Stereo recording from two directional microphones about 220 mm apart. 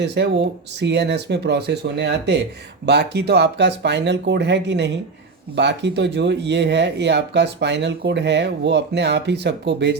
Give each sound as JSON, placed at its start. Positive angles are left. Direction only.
{"t": 0.0, "sound": "speech", "side_deg": -50}